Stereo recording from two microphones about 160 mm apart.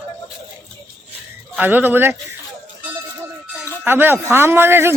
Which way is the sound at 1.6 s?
10° right (ahead or behind).